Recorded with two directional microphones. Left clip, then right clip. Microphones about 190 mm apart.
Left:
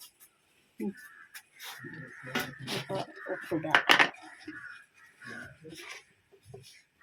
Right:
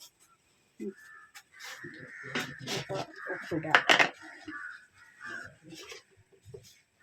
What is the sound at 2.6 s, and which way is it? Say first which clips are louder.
Music: even; centre (ahead or behind).